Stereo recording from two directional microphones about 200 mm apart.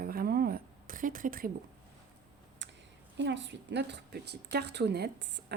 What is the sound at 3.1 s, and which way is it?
A woman's voice, 60° right (ahead or behind).